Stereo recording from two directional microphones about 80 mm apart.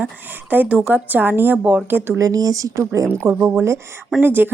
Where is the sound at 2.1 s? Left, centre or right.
Right.